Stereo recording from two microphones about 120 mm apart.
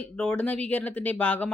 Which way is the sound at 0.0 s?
10° left (ahead or behind).